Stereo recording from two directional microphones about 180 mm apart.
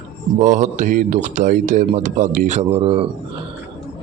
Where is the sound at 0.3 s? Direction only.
40° right (ahead or behind).